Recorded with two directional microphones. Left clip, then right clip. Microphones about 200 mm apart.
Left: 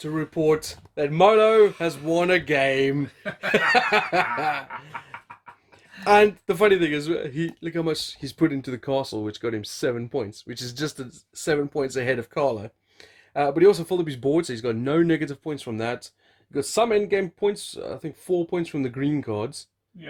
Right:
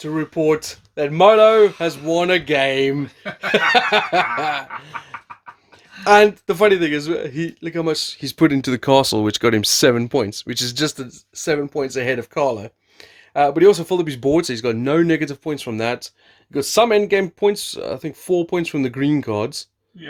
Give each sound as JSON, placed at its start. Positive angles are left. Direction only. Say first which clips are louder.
{"t": 0.0, "sound": "speech", "louder": "right 4 dB", "side_deg": -5}
{"t": 6.1, "sound": "speech", "louder": "right 5 dB", "side_deg": -10}
{"t": 8.4, "sound": "speech", "louder": "right 11 dB", "side_deg": -40}
{"t": 11.4, "sound": "speech", "louder": "right 3 dB", "side_deg": -5}